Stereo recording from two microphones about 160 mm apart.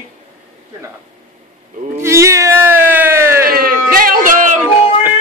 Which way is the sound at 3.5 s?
65° right (ahead or behind).